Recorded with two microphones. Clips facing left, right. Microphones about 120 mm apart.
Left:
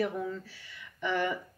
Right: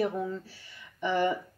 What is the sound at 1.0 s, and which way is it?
Speech, 30° right (ahead or behind).